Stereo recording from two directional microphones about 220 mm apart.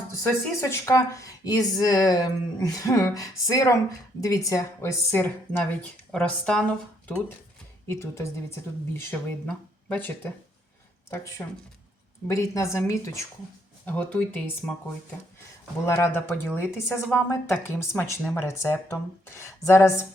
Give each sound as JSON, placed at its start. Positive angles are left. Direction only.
{"t": 0.2, "sound": "speech", "side_deg": 10}
{"t": 7.9, "sound": "speech", "side_deg": 10}
{"t": 15.9, "sound": "speech", "side_deg": 10}